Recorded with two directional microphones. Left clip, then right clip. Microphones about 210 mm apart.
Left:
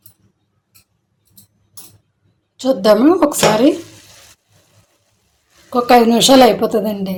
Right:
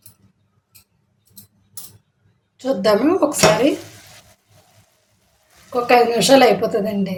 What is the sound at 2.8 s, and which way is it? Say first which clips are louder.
Speech: left 5 dB; 25° left (ahead or behind).